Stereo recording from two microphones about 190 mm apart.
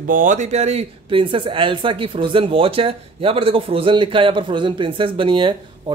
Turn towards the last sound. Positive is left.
turn(degrees=-25)  # may be behind; listen again after turning